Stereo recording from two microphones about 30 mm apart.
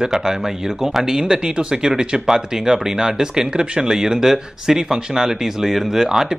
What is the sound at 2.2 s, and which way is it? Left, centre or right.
Speech, centre.